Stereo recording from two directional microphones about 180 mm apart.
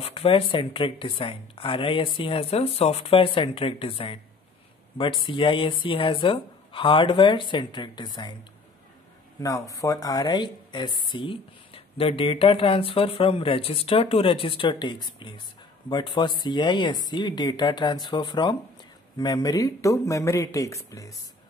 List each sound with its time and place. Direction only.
0.0 s speech: 30° left (ahead or behind)
9.4 s speech: 20° left (ahead or behind)